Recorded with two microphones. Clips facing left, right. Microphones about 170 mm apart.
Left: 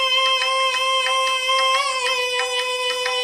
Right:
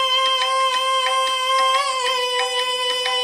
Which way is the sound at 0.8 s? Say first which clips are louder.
Right 1 dB; 15° left (ahead or behind).